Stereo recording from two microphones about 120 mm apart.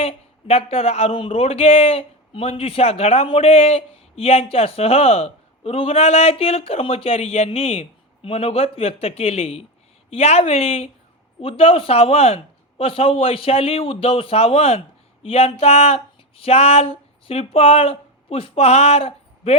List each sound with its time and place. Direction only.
0.0 s speech: 55° left (ahead or behind)